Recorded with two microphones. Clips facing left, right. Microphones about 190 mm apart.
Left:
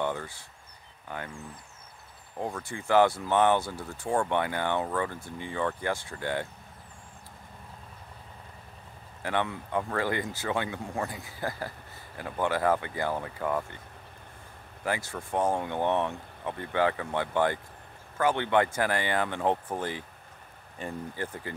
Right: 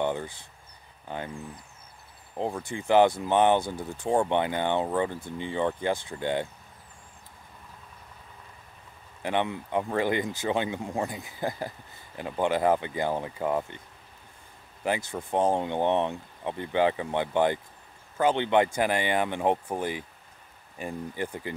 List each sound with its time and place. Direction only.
0.0 s speech: 20° right (ahead or behind)
2.3 s speech: 20° right (ahead or behind)
9.2 s speech: 20° right (ahead or behind)
14.9 s speech: 20° right (ahead or behind)